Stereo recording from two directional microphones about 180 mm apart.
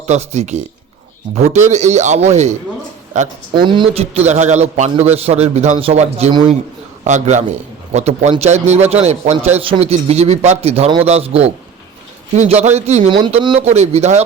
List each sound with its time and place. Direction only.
0.1 s a man's voice: 40° right (ahead or behind)
3.5 s a man's voice: 25° right (ahead or behind)
13.1 s speech: 25° right (ahead or behind)
13.6 s a man's voice: 35° right (ahead or behind)